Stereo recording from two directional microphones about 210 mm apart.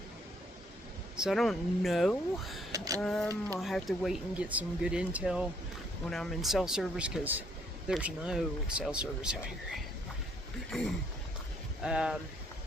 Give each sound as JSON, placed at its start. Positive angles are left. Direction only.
{"t": 1.1, "sound": "speech", "side_deg": 0}
{"t": 2.7, "sound": "speech", "side_deg": -15}
{"t": 3.0, "sound": "speech", "side_deg": 5}
{"t": 10.7, "sound": "a sound", "side_deg": 0}
{"t": 11.8, "sound": "speech", "side_deg": -5}